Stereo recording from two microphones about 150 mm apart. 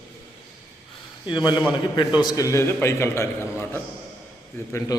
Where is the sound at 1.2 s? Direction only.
30° left (ahead or behind).